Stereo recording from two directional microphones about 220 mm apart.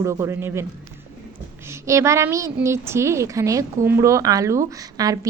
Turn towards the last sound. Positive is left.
turn(degrees=-15)  # may be behind; listen again after turning